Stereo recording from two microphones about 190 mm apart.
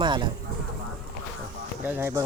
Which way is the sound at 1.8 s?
10° right (ahead or behind).